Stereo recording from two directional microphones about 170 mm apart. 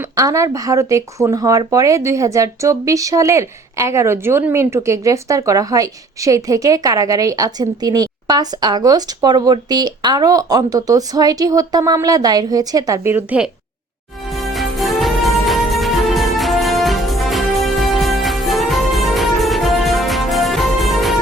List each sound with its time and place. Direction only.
0.0 s speech: 20° right (ahead or behind)
14.3 s music: centre (ahead or behind)